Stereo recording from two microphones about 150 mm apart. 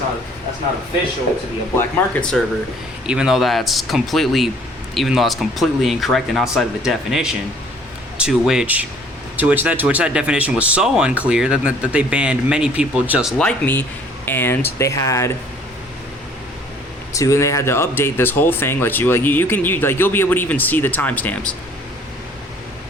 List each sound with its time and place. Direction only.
1.7 s speech: 15° left (ahead or behind)
3.1 s speech: 5° right (ahead or behind)
13.4 s speech: 10° left (ahead or behind)
17.2 s speech: 20° left (ahead or behind)